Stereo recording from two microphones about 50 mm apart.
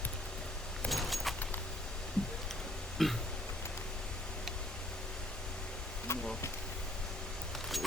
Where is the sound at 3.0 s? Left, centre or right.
Centre.